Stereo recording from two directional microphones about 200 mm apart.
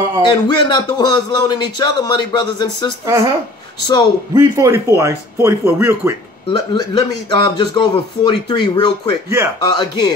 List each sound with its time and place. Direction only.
0.3 s a man's voice: 20° left (ahead or behind)
3.1 s speech: 15° right (ahead or behind)
3.8 s a man's voice: 20° left (ahead or behind)
4.3 s speech: 15° right (ahead or behind)
6.5 s a man's voice: 20° left (ahead or behind)